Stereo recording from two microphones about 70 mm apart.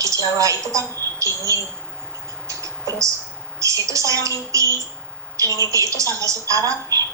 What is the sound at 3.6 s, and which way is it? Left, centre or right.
A woman's voice, right.